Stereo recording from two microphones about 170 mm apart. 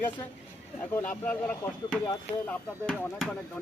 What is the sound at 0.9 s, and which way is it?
Speech, 10° left (ahead or behind).